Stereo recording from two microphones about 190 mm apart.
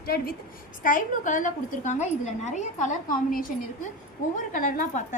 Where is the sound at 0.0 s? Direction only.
55° left (ahead or behind).